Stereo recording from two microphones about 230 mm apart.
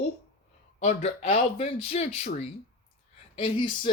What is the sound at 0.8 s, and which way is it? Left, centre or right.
Speech, left.